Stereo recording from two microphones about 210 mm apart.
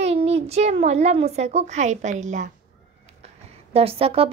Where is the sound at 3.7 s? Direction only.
30° right (ahead or behind).